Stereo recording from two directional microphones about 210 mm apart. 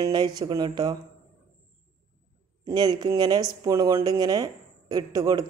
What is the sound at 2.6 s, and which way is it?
A woman's voice, 20° right (ahead or behind).